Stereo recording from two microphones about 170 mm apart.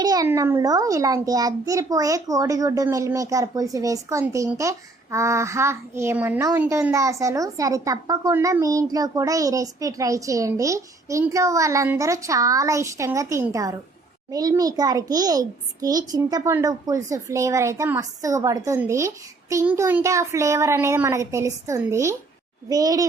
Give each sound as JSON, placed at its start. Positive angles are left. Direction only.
{"t": 0.0, "sound": "a child's voice", "side_deg": -20}